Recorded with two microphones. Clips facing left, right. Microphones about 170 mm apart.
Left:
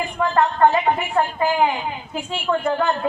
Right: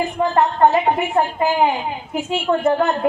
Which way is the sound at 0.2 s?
25° right (ahead or behind).